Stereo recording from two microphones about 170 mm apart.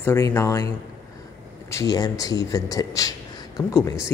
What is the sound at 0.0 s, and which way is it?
Speech, 15° left (ahead or behind).